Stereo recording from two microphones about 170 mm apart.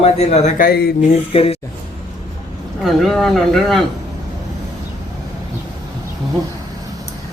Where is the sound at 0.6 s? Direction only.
70° left (ahead or behind).